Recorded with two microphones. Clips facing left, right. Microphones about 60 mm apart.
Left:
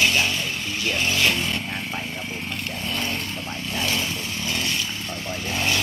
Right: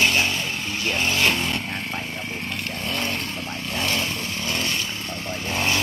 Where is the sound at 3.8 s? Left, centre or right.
Right.